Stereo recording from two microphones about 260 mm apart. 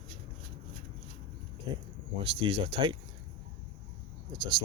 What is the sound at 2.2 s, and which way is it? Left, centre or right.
Speech, right.